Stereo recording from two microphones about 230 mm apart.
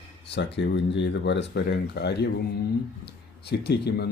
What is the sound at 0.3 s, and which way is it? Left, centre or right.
Speech, left.